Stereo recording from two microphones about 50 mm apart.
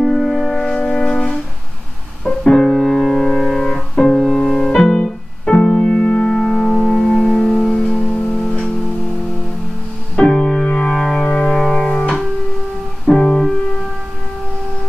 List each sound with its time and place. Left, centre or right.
0.0 s music: centre
0.7 s music: centre
2.2 s piano: centre
4.2 s music: centre
4.8 s piano: left
6.9 s music: centre
7.9 s music: centre
10.2 s music: centre